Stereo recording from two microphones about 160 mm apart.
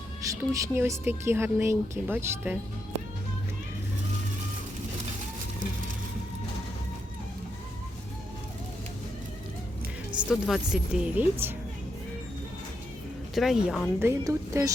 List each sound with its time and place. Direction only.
0.3 s speech: 20° right (ahead or behind)
10.2 s speech: centre (ahead or behind)
13.3 s speech: centre (ahead or behind)
14.0 s speech: 15° right (ahead or behind)